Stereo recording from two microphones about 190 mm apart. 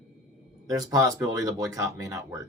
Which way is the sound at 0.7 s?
20° right (ahead or behind).